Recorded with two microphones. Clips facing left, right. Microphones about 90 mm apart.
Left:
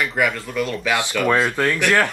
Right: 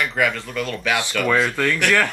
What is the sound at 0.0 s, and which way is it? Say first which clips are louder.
Speech: even; 10° left (ahead or behind).